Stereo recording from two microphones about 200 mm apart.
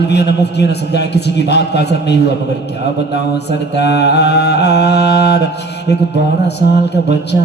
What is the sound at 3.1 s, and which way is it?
Mantra, 55° left (ahead or behind).